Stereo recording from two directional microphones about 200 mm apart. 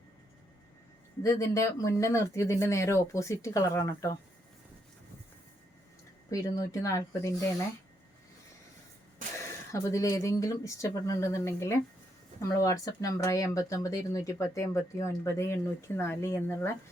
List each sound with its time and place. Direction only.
1.2 s speech: 15° left (ahead or behind)
6.3 s speech: 15° left (ahead or behind)
9.7 s speech: 15° left (ahead or behind)